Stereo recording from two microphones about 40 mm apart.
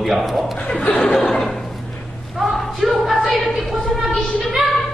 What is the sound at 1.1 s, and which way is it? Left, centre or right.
Chuckle, centre.